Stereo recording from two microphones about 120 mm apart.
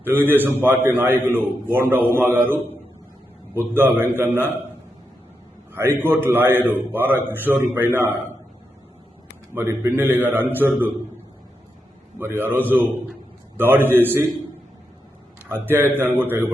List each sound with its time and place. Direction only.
0.1 s a man's voice: 15° right (ahead or behind)
5.7 s a man's voice: 20° right (ahead or behind)
9.6 s a man's voice: 20° right (ahead or behind)
12.2 s a man's voice: 20° right (ahead or behind)
15.4 s a man's voice: 20° right (ahead or behind)